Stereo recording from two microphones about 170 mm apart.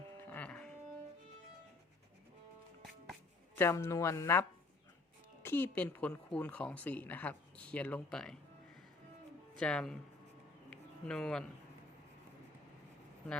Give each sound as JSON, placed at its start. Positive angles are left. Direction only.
{"t": 0.3, "sound": "music", "side_deg": 10}
{"t": 3.5, "sound": "speech", "side_deg": 15}
{"t": 9.6, "sound": "speech", "side_deg": 5}
{"t": 10.7, "sound": "a sound", "side_deg": 5}